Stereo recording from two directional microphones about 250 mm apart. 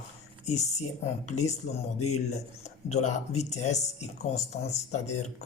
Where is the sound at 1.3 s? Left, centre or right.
Left.